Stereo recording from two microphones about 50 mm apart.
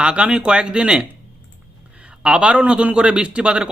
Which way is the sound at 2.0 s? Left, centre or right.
Right.